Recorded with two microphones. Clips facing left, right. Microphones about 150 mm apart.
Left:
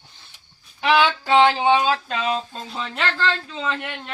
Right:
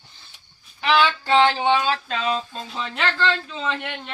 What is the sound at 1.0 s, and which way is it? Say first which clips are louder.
Speech: left 1 dB; 15° left (ahead or behind).